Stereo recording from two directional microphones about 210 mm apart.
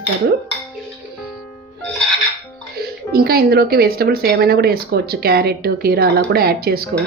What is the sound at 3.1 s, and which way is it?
Speech, 45° right (ahead or behind).